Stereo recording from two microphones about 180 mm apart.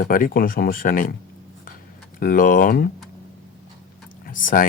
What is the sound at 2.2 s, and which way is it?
Speech, 50° left (ahead or behind).